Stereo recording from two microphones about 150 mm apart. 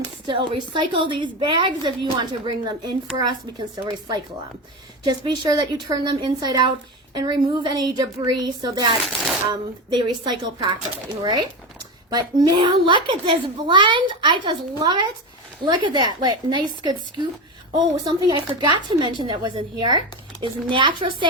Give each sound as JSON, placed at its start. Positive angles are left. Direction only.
{"t": 0.3, "sound": "a child's voice", "side_deg": -30}
{"t": 5.0, "sound": "a woman's voice", "side_deg": -30}